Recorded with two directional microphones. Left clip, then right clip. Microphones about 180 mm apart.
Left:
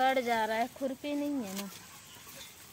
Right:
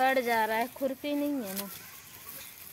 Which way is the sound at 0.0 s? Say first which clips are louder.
Right 2 dB; 35° right (ahead or behind).